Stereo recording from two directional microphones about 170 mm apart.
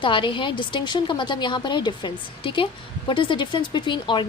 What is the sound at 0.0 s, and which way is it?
A woman's voice, 30° left (ahead or behind).